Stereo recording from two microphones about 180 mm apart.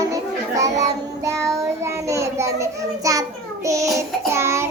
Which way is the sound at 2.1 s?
15° right (ahead or behind).